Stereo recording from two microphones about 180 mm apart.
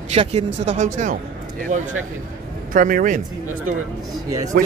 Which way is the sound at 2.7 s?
50° right (ahead or behind).